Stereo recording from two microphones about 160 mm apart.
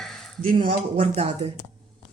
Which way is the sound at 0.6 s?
40° right (ahead or behind).